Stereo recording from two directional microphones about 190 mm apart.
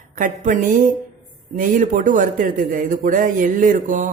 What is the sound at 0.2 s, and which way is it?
Speech, 45° right (ahead or behind).